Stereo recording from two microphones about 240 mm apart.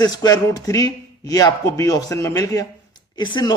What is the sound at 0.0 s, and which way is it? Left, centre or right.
Speech, centre.